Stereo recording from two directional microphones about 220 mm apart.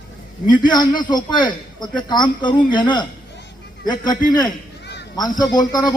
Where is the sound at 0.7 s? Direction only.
20° left (ahead or behind).